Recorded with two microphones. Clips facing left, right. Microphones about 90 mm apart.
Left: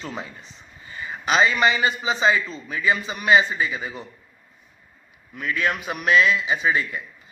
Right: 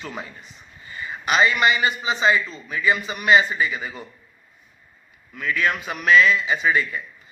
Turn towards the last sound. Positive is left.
turn(degrees=20)  # may be behind; listen again after turning